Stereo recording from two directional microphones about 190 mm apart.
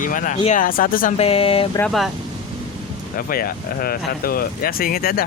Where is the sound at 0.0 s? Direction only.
45° left (ahead or behind).